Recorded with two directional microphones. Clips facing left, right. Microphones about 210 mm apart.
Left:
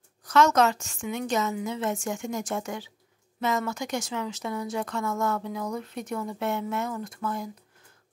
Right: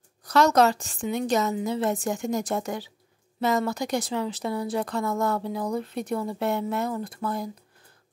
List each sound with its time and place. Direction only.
0.2 s speech: 35° right (ahead or behind)